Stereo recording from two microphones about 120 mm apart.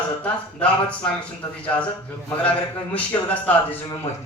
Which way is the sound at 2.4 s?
10° left (ahead or behind).